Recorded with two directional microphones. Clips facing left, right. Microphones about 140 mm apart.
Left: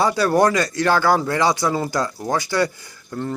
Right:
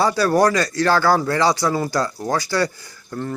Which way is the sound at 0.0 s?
20° left (ahead or behind).